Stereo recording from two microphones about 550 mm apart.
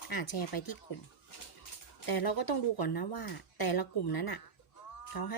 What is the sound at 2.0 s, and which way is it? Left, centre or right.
Speech, left.